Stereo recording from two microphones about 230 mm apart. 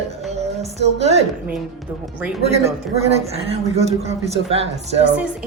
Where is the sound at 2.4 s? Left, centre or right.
Right.